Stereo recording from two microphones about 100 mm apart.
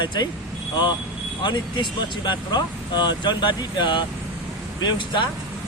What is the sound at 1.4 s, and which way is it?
Speech, 50° left (ahead or behind).